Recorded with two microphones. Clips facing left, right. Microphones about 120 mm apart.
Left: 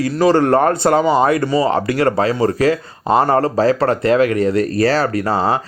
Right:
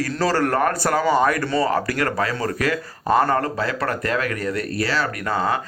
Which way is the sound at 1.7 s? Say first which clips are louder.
Left 6 dB; 25° left (ahead or behind).